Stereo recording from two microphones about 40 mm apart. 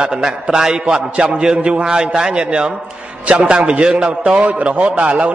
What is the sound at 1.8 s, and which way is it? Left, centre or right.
A man's voice, centre.